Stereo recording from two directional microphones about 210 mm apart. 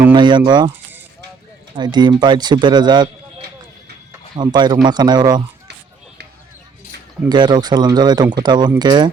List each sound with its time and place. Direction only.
0.1 s speech: 20° right (ahead or behind)
1.7 s speech: 20° right (ahead or behind)
7.3 s speech: 20° right (ahead or behind)